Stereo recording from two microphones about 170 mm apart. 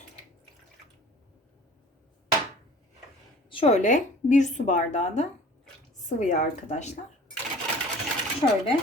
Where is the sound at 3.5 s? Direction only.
35° left (ahead or behind).